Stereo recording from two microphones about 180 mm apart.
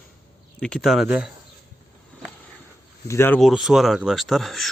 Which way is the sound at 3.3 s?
Centre (ahead or behind).